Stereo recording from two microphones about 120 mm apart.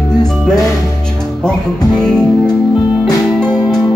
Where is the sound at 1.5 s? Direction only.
5° left (ahead or behind).